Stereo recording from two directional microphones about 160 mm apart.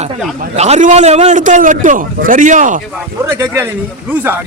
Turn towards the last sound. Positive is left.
turn(degrees=-10)  # may be behind; listen again after turning